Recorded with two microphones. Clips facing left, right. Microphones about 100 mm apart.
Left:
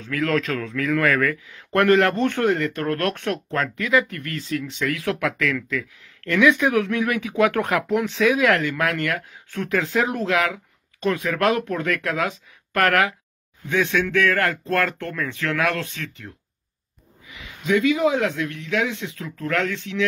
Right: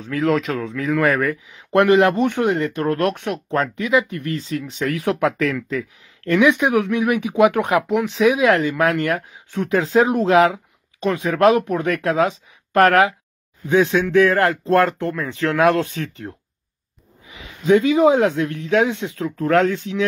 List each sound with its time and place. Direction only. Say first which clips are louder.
0.0 s speech: right 3 dB; 25° right (ahead or behind)